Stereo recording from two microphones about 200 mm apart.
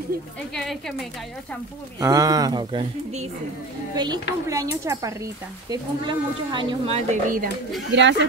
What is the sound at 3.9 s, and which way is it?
Speech, 20° right (ahead or behind).